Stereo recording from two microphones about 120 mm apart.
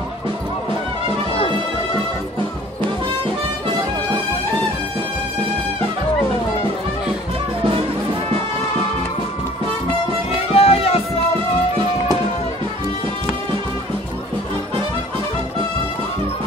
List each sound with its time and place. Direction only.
10.5 s music: 55° left (ahead or behind)